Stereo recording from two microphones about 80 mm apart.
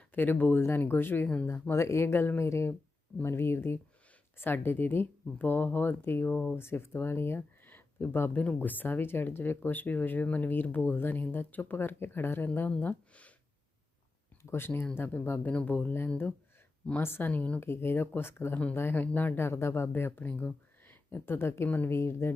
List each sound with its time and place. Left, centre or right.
0.1 s speech: left
6.3 s speech: centre
6.6 s speech: left
14.4 s speech: left
17.6 s speech: left